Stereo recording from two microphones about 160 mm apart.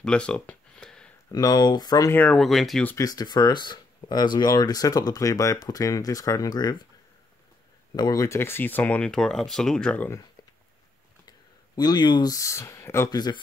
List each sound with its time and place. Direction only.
0.0 s a sound: 5° left (ahead or behind)
1.3 s speech: 25° left (ahead or behind)
2.1 s speech: 5° left (ahead or behind)
2.9 s speech: 20° left (ahead or behind)
7.9 s speech: 25° left (ahead or behind)
11.2 s speech: 25° left (ahead or behind)